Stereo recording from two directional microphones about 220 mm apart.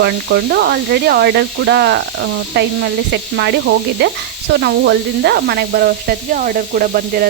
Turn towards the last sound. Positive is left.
turn(degrees=-40)  # may be behind; listen again after turning